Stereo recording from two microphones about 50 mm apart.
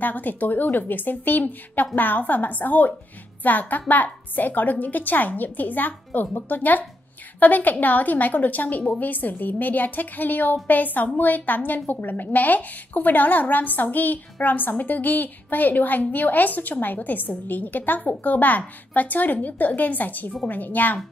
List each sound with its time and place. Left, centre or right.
0.0 s a woman's voice: left